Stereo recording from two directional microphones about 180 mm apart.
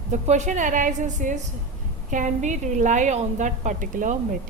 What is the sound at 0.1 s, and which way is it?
A woman's voice, 40° right (ahead or behind).